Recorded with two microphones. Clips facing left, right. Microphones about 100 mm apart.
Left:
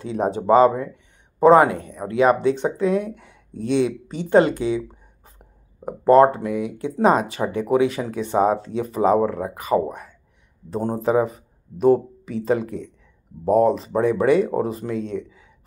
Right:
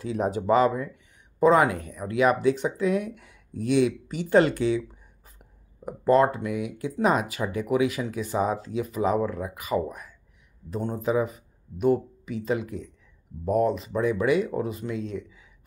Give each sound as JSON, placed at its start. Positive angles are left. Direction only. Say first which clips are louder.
{"t": 0.0, "sound": "speech", "louder": "left 4 dB", "side_deg": 30}